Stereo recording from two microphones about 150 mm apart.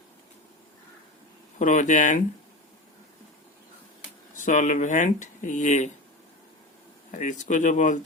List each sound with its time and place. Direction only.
1.5 s speech: 55° left (ahead or behind)
4.4 s speech: 55° left (ahead or behind)
7.1 s speech: 55° left (ahead or behind)